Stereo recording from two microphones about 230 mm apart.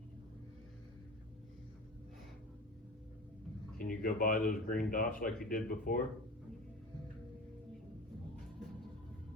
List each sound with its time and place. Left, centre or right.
3.8 s speech: left